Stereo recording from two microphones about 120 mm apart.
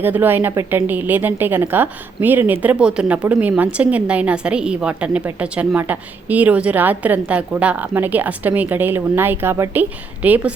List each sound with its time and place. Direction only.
0.0 s a woman's voice: 15° right (ahead or behind)